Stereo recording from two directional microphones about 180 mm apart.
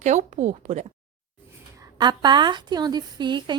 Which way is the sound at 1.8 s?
25° right (ahead or behind).